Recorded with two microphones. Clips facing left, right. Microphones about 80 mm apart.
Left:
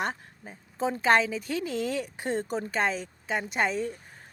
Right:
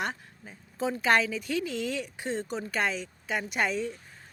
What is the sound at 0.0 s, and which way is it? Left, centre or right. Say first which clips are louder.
Speech: left 2 dB; left.